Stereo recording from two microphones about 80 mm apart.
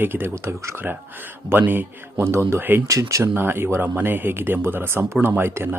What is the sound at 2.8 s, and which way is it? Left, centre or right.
Speech, right.